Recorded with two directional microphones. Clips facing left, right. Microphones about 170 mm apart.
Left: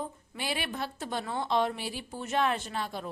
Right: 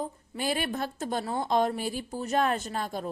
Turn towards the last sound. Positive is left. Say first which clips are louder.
# right 3 dB
turn(degrees=-45)  # may be behind; listen again after turning